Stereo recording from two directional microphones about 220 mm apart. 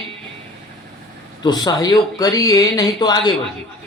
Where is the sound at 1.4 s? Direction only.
20° left (ahead or behind).